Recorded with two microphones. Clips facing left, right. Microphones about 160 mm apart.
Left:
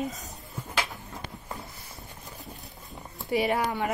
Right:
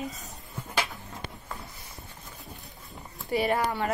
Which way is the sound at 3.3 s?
15° left (ahead or behind).